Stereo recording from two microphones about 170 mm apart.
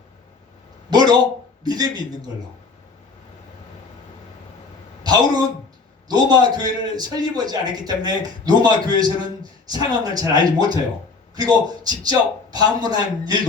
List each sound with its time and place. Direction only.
0.9 s a sound: 25° right (ahead or behind)
1.6 s a man's voice: 25° right (ahead or behind)
5.0 s a man's voice: 25° right (ahead or behind)